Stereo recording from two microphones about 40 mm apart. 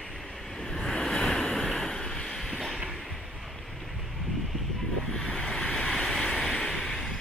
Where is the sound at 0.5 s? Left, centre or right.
Centre.